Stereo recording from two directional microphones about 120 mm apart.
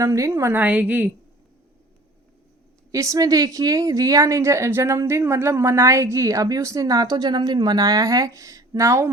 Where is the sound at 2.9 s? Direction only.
25° right (ahead or behind).